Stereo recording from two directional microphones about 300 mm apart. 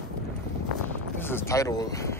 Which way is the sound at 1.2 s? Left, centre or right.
Centre.